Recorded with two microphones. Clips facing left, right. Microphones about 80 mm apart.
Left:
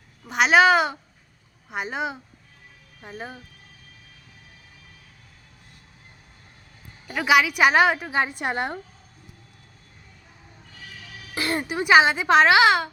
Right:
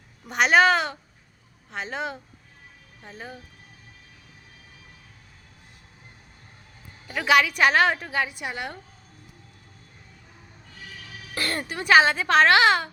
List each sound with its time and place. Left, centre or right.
0.3 s a woman's voice: centre
3.0 s speech: centre
7.1 s speech: centre
8.3 s a woman's voice: left
11.3 s speech: centre